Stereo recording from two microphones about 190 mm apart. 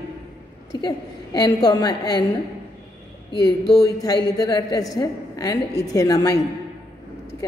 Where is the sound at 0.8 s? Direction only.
20° left (ahead or behind).